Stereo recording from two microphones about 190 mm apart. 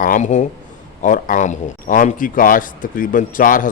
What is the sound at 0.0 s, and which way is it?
A man's voice, 40° left (ahead or behind).